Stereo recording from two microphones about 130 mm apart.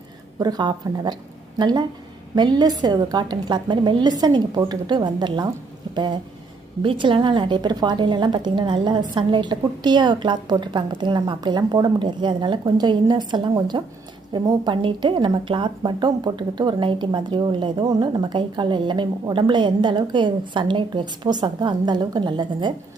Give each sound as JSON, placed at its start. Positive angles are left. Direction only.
{"t": 0.3, "sound": "a woman's voice", "side_deg": -30}